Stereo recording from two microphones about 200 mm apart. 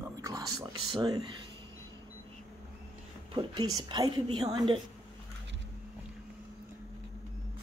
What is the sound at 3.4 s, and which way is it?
A woman's voice, 20° right (ahead or behind).